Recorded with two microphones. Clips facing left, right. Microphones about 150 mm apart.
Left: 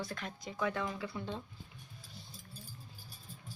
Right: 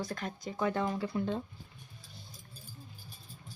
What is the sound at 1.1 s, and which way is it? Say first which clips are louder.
Speech: right 8 dB; 50° right (ahead or behind).